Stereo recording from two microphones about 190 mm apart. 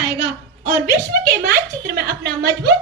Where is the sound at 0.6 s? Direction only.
50° right (ahead or behind).